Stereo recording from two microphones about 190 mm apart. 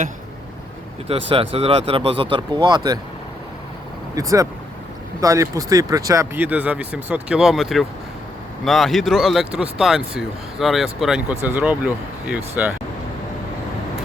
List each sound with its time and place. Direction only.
1.3 s speech: 30° right (ahead or behind)
4.1 s speech: 15° right (ahead or behind)